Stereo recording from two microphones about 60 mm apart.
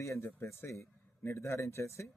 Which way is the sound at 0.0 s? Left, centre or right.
Left.